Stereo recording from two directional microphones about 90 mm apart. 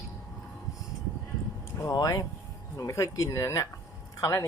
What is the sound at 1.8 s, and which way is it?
Speech, 40° left (ahead or behind).